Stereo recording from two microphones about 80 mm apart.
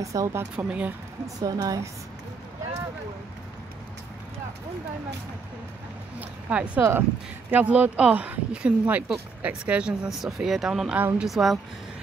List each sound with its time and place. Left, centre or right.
0.0 s speech: right
0.7 s a woman's voice: centre
1.2 s speech: right
6.1 s speech: centre
6.8 s speech: right; by 11.6 s centre